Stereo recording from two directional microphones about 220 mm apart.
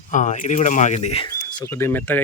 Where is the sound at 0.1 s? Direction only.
35° left (ahead or behind).